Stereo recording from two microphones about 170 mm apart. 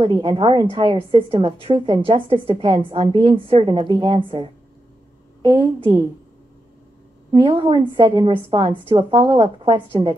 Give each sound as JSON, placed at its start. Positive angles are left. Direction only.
{"t": 0.0, "sound": "a woman's voice", "side_deg": -30}
{"t": 7.2, "sound": "a woman's voice", "side_deg": -30}